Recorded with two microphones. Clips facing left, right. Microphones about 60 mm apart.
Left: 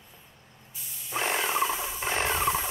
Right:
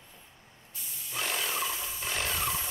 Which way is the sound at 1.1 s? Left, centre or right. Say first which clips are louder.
Left 6 dB; left.